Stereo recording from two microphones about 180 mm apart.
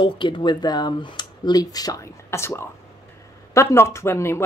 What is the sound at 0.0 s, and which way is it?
Speech, 25° left (ahead or behind).